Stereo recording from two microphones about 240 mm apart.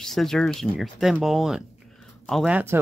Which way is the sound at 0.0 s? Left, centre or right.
Centre.